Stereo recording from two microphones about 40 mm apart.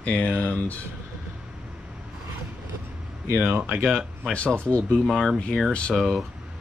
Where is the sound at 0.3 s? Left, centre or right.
Left.